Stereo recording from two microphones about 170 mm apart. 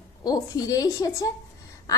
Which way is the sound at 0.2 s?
20° left (ahead or behind).